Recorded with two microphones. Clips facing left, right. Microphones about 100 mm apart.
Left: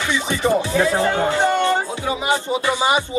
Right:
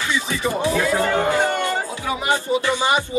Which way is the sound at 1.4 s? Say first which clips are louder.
Left 4 dB; 25° left (ahead or behind).